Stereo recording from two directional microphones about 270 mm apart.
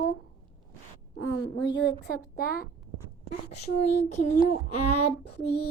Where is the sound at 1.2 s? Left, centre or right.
Left.